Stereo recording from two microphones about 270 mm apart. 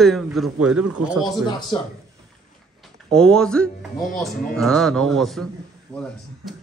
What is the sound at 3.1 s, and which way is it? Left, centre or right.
A man's voice, centre.